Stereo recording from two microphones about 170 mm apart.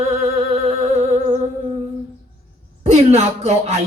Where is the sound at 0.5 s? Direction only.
40° right (ahead or behind).